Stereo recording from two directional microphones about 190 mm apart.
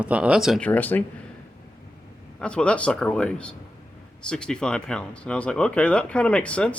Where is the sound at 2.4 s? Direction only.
5° left (ahead or behind).